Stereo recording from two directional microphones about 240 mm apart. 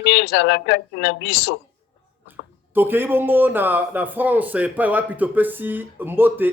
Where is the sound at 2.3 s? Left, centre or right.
Centre.